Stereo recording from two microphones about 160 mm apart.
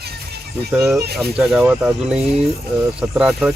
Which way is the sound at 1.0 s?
80° right.